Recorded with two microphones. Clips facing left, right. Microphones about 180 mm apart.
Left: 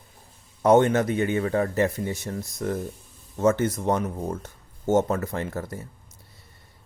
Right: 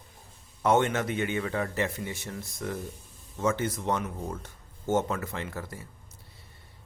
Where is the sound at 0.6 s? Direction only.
40° left (ahead or behind).